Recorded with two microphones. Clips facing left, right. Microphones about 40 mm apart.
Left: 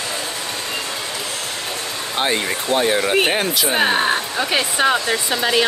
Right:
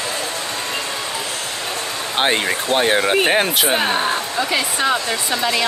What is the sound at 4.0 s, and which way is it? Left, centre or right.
Speech, left.